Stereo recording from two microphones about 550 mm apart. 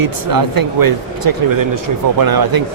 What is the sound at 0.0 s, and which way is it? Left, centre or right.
Speech, right.